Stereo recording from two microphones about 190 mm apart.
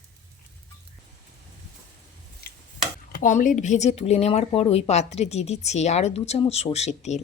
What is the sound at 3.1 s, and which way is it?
A woman's voice, 45° left (ahead or behind).